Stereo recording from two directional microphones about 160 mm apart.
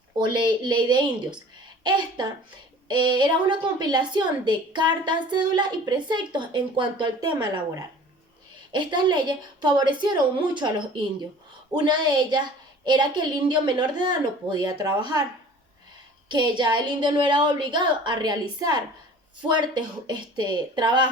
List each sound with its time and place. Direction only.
0.3 s a woman's voice: 30° right (ahead or behind)
16.3 s a woman's voice: 30° right (ahead or behind)